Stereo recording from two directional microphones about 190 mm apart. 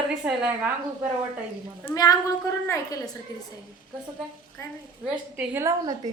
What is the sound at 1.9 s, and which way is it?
Speech, 20° left (ahead or behind).